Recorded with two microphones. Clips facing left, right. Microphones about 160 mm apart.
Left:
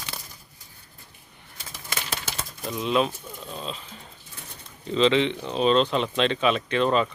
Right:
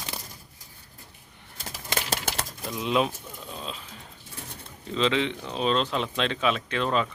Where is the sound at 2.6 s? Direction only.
Centre (ahead or behind).